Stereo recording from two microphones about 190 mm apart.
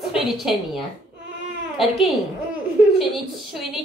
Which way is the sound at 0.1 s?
Centre (ahead or behind).